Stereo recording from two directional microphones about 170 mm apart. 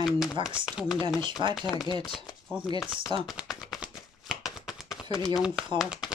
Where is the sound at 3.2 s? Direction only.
Centre (ahead or behind).